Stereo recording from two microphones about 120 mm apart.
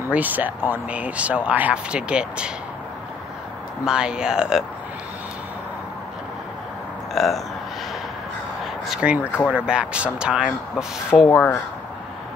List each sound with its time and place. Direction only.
0.1 s speech: 15° right (ahead or behind)
3.8 s speech: 5° right (ahead or behind)
7.2 s speech: centre (ahead or behind)
8.8 s speech: 5° right (ahead or behind)
11.2 s speech: 20° left (ahead or behind)